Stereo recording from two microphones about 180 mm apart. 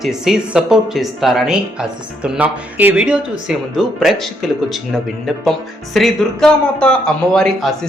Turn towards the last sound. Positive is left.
turn(degrees=0)  # may be behind; listen again after turning